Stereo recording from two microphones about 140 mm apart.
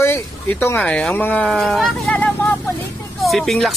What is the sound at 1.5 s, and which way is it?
Speech, centre (ahead or behind).